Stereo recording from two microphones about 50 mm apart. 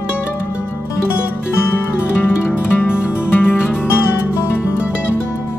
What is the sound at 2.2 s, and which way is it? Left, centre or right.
Music, left.